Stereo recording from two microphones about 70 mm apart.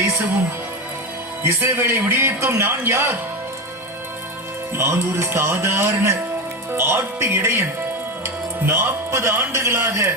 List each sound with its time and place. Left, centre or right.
1.5 s a man's voice: right
4.8 s a man's voice: right